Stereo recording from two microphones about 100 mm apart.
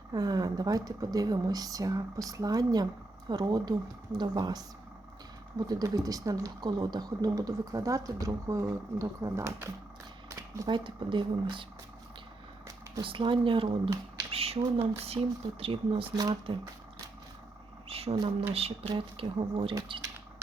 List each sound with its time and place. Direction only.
0.1 s speech: 40° right (ahead or behind)
10.2 s a sound: 30° right (ahead or behind)
10.7 s speech: 55° right (ahead or behind)
13.0 s speech: 60° right (ahead or behind)
14.3 s speech: 80° right
15.2 s speech: 45° right (ahead or behind)
15.6 s speech: 65° right (ahead or behind)
16.5 s speech: 55° right (ahead or behind)
17.8 s a sound: 80° right
18.5 s speech: 85° right; by 19.7 s 60° right (ahead or behind)